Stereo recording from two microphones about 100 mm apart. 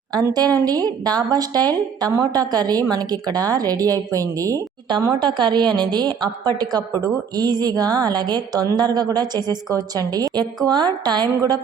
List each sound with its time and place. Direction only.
0.1 s a woman's voice: 40° right (ahead or behind)
5.2 s a woman's voice: 50° right (ahead or behind)